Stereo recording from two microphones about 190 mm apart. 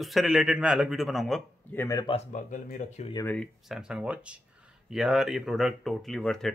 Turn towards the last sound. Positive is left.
turn(degrees=5)  # may be behind; listen again after turning